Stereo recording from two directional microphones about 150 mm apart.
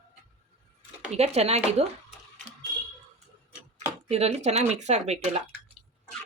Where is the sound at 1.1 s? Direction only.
45° right (ahead or behind).